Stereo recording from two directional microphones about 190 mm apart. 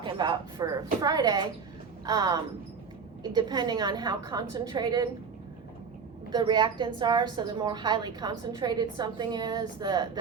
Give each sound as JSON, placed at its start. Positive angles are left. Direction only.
{"t": 0.0, "sound": "a woman's voice", "side_deg": -25}
{"t": 6.3, "sound": "a woman's voice", "side_deg": -25}